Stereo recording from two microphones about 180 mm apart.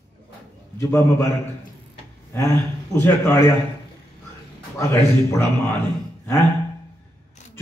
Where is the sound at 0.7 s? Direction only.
15° left (ahead or behind).